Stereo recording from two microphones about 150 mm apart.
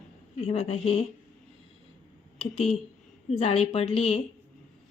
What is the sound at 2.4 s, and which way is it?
A woman's voice, 40° left (ahead or behind).